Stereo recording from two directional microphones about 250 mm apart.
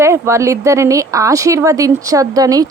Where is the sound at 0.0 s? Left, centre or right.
Centre.